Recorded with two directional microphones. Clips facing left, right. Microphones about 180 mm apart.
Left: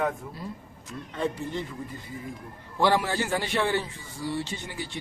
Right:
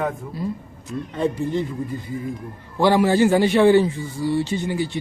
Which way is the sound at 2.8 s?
10° right (ahead or behind).